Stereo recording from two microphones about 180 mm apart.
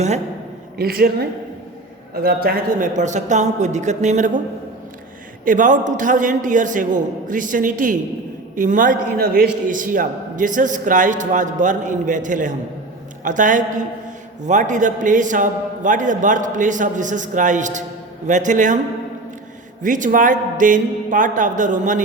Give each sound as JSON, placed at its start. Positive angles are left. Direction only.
{"t": 0.8, "sound": "a man's voice", "side_deg": -55}
{"t": 2.2, "sound": "a man's voice", "side_deg": -55}
{"t": 5.5, "sound": "a man's voice", "side_deg": -45}
{"t": 19.8, "sound": "a man's voice", "side_deg": -45}